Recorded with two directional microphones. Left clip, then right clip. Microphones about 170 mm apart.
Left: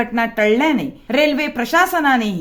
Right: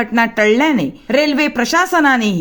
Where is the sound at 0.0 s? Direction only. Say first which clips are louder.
Right 3 dB; 35° right (ahead or behind).